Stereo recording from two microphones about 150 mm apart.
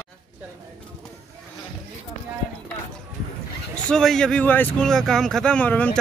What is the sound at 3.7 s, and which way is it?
Speech, 5° left (ahead or behind).